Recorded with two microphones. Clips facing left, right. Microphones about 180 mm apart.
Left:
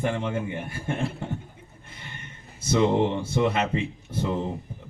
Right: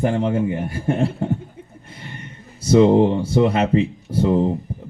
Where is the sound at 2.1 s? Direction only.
35° right (ahead or behind).